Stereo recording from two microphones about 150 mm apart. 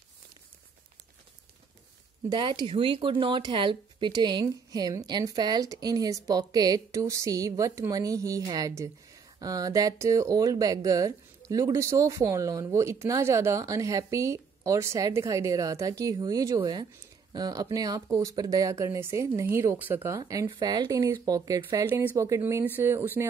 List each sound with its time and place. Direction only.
2.2 s speech: 30° right (ahead or behind); by 23.2 s 15° right (ahead or behind)